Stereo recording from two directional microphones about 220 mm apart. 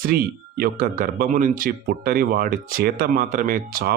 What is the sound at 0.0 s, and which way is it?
Speech, 45° right (ahead or behind).